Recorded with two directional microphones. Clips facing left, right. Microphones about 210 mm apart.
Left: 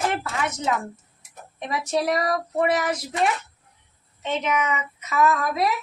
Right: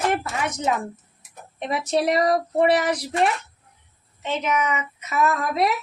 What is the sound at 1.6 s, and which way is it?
A woman's voice, 25° right (ahead or behind).